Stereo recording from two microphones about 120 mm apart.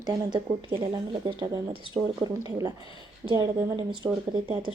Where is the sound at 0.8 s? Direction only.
45° right (ahead or behind).